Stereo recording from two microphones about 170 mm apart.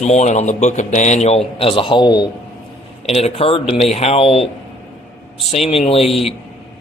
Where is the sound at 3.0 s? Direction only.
35° left (ahead or behind).